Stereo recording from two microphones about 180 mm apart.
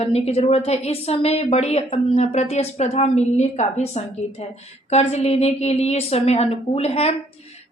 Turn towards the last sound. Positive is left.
turn(degrees=35)  # may be behind; listen again after turning